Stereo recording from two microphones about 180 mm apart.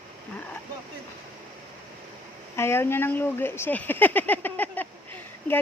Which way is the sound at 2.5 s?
15° left (ahead or behind).